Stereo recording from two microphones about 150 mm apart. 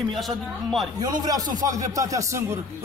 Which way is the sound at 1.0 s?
25° right (ahead or behind).